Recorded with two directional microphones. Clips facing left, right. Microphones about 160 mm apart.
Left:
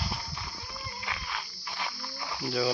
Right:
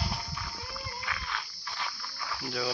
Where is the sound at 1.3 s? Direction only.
20° left (ahead or behind).